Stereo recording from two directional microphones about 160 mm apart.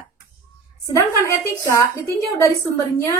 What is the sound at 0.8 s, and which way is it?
A woman's voice, 20° left (ahead or behind).